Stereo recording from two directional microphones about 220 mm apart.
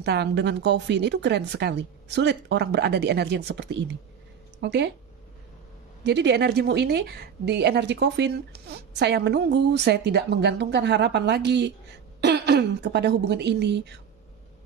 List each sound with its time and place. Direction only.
0.0 s a woman's voice: 50° right (ahead or behind)
6.0 s a woman's voice: 50° right (ahead or behind)